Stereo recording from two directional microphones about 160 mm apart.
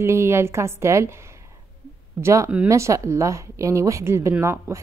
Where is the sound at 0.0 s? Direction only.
15° right (ahead or behind).